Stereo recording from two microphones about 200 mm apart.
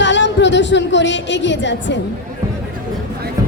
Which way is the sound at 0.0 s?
60° left (ahead or behind).